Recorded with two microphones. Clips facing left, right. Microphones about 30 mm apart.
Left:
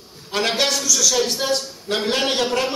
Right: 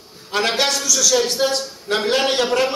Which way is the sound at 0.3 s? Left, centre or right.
Centre.